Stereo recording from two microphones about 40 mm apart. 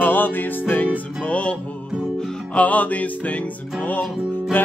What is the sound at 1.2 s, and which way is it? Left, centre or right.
Music, left.